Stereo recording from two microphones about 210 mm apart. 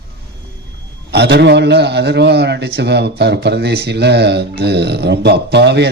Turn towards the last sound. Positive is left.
turn(degrees=-55)  # may be behind; listen again after turning